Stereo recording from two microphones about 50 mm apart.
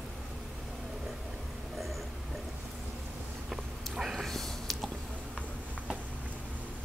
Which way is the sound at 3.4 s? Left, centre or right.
Centre.